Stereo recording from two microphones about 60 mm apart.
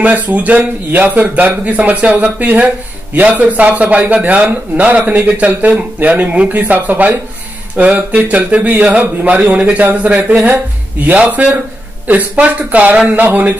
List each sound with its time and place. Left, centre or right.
0.0 s a man's voice: right